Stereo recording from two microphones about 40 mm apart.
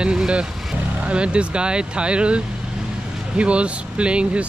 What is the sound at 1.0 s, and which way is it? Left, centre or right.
Speech, right.